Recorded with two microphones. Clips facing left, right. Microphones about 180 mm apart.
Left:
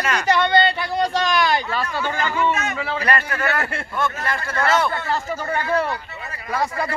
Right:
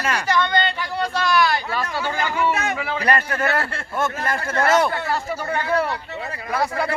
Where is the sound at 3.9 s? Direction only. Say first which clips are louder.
Right 2 dB; 45° right (ahead or behind).